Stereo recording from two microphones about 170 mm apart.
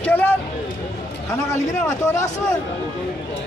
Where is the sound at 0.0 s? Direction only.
10° left (ahead or behind).